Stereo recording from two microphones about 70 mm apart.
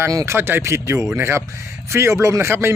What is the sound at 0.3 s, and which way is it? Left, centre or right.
Speech, right.